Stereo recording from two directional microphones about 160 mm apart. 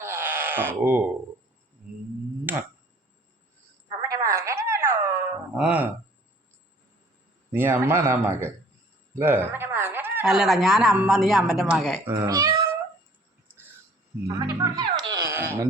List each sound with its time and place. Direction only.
0.0 s a sound: 15° right (ahead or behind)
2.5 s speech: 10° right (ahead or behind)
4.1 s a sound: 20° right (ahead or behind)
5.5 s a man's voice: 5° right (ahead or behind)
7.5 s a man's voice: 15° right (ahead or behind)
11.9 s speech: 20° right (ahead or behind)
14.3 s speech: 20° right (ahead or behind)
15.3 s wail: 15° right (ahead or behind)